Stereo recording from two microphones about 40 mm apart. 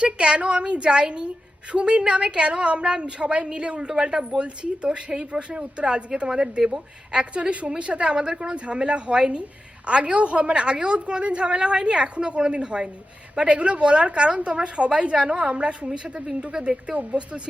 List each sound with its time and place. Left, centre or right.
0.0 s a woman's voice: right
16.9 s speech: right